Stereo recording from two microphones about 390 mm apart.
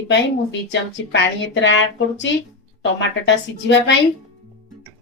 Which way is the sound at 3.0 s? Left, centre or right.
Left.